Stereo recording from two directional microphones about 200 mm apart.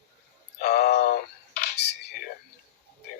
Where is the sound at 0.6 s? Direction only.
55° left (ahead or behind).